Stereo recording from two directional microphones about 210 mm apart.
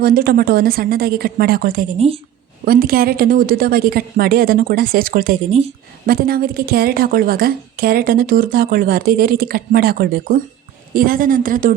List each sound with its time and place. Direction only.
0.0 s a woman's voice: 45° right (ahead or behind)
2.0 s a woman's voice: 30° right (ahead or behind)
2.6 s a woman's voice: 45° right (ahead or behind)
6.1 s a woman's voice: 45° right (ahead or behind)